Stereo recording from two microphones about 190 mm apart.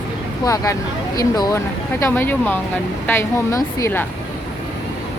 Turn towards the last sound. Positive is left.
turn(degrees=15)  # may be behind; listen again after turning